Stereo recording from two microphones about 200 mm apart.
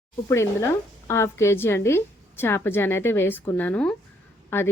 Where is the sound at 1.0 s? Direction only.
15° left (ahead or behind).